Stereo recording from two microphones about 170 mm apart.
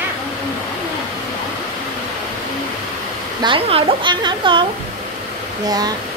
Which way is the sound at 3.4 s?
30° right (ahead or behind).